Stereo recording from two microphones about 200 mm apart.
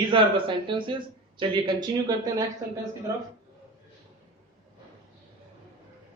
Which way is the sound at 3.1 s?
15° right (ahead or behind).